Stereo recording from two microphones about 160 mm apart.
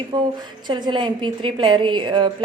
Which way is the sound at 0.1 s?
25° right (ahead or behind).